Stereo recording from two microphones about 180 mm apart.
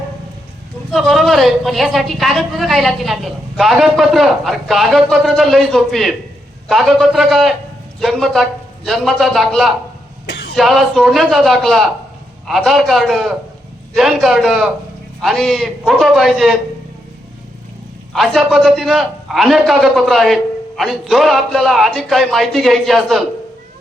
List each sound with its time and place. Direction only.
0.9 s speech: centre (ahead or behind)
10.2 s a sound: 90° left
10.5 s speech: centre (ahead or behind)
18.1 s speech: centre (ahead or behind)